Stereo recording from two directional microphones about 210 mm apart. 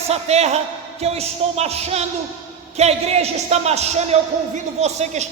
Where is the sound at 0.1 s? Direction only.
30° right (ahead or behind).